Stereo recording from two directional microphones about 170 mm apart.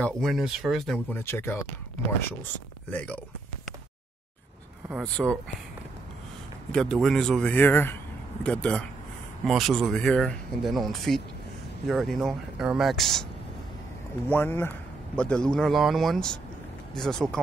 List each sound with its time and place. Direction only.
0.0 s speech: centre (ahead or behind)
4.8 s speech: centre (ahead or behind)
6.7 s speech: 5° left (ahead or behind)
14.3 s speech: 15° left (ahead or behind)